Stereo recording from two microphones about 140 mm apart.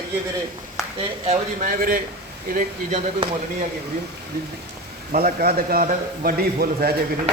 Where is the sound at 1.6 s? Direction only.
85° right.